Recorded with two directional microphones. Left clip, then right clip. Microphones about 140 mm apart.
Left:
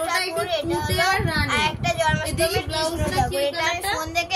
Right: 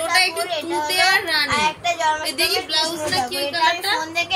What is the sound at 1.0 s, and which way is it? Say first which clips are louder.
Speech: right 5 dB; 70° left (ahead or behind).